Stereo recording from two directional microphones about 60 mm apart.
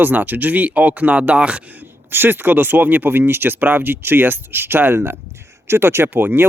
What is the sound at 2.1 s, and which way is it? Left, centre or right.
Speech, right.